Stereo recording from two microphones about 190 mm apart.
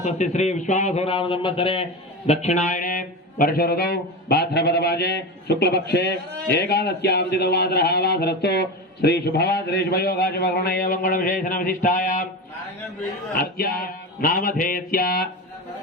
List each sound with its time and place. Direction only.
0.0 s a man's voice: 40° left (ahead or behind)
13.3 s a man's voice: 50° left (ahead or behind)